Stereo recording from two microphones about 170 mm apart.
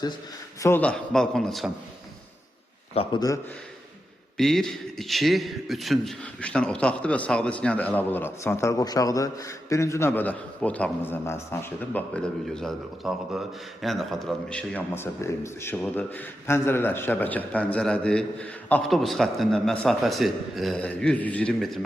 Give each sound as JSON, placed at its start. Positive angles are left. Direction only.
{"t": 0.6, "sound": "a man's voice", "side_deg": 10}
{"t": 2.9, "sound": "a man's voice", "side_deg": 35}
{"t": 4.4, "sound": "a man's voice", "side_deg": 0}